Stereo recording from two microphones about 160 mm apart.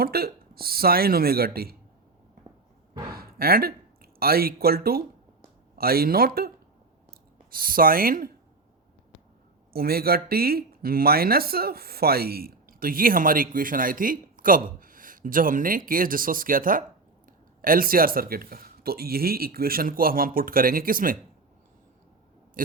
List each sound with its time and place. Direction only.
0.0 s speech: 70° right (ahead or behind)
3.1 s speech: 70° right (ahead or behind)
9.7 s speech: 70° right (ahead or behind)
22.6 s a sound: 60° right (ahead or behind)